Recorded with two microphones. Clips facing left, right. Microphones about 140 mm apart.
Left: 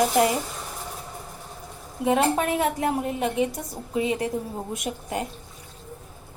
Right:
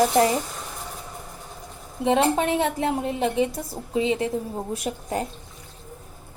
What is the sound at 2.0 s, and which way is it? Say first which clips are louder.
A woman's voice: right 1 dB; 30° right (ahead or behind).